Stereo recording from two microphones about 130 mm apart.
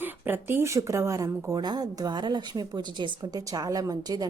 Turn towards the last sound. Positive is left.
turn(degrees=-30)  # may be behind; listen again after turning